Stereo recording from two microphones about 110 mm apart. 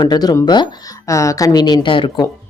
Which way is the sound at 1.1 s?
30° left (ahead or behind).